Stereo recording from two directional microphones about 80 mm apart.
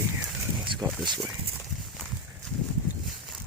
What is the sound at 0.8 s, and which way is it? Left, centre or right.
Speech, right.